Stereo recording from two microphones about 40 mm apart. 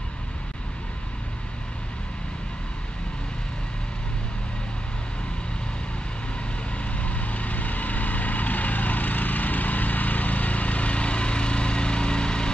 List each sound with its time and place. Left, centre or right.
6.7 s vehicle: left